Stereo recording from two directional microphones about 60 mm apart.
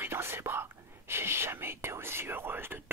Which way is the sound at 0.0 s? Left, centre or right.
Right.